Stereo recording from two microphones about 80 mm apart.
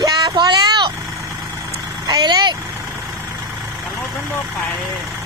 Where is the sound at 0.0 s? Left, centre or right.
Right.